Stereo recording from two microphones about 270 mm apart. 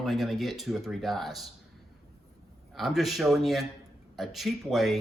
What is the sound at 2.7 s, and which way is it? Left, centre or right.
A man's voice, centre.